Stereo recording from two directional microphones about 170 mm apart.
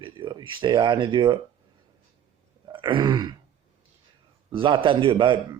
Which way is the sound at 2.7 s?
30° right (ahead or behind).